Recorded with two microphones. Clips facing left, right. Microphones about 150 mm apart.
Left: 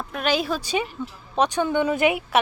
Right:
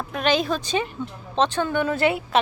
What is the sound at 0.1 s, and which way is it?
Speech, 5° left (ahead or behind).